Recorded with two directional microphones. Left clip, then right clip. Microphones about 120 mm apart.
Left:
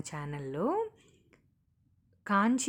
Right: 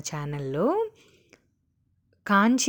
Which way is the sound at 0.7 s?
40° right (ahead or behind).